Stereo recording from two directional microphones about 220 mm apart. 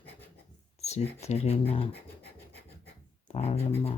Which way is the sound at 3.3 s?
30° left (ahead or behind).